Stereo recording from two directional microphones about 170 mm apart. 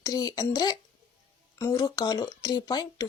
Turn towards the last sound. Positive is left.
turn(degrees=25)  # may be behind; listen again after turning